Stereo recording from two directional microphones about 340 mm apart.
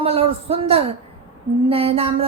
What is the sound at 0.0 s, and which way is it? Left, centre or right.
A man's voice, centre.